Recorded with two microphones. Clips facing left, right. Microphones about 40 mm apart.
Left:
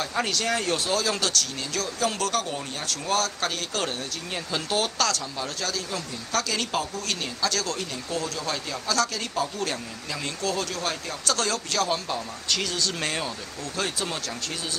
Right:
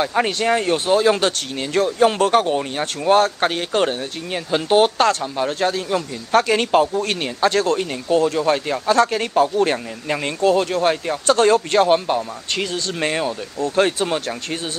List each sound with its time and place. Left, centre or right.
0.0 s speech: right
13.7 s speech: right